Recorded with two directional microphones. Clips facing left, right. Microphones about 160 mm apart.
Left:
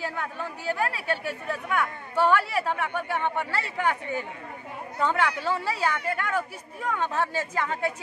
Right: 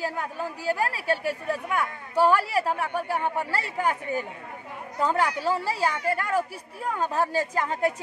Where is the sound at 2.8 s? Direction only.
35° right (ahead or behind).